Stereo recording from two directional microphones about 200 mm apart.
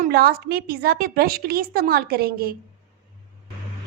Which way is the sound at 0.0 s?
50° right (ahead or behind).